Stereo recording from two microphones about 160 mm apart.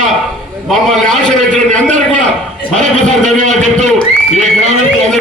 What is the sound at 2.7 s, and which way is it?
Speech, 45° right (ahead or behind).